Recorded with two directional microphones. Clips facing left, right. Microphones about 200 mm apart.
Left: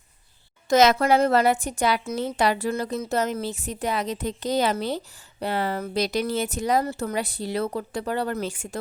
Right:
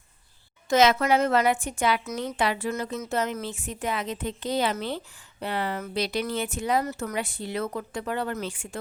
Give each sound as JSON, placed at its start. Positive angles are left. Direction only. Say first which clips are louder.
{"t": 0.7, "sound": "a woman's voice", "louder": "left 2 dB", "side_deg": 40}